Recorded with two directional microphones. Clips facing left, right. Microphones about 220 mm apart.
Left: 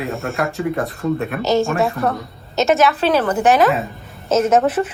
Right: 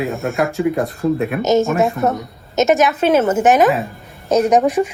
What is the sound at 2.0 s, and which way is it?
A woman's voice, 20° right (ahead or behind).